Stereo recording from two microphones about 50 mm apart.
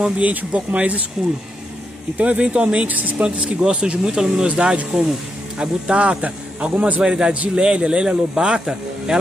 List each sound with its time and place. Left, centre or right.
0.2 s speech: right
2.1 s speech: right
7.0 s speech: centre